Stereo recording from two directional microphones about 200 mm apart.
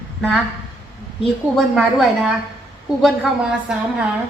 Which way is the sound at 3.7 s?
5° right (ahead or behind).